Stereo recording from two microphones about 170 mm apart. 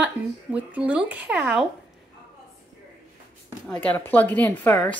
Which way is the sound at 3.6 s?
5° left (ahead or behind).